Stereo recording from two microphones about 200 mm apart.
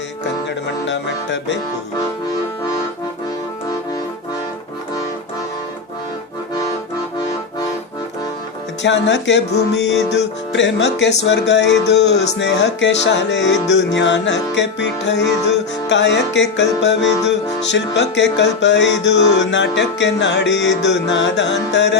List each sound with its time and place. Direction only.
0.9 s music: 60° left (ahead or behind)
8.8 s music: 65° left (ahead or behind)